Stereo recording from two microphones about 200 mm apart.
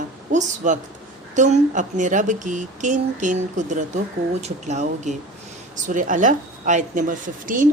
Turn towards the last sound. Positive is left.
turn(degrees=-40)  # may be behind; listen again after turning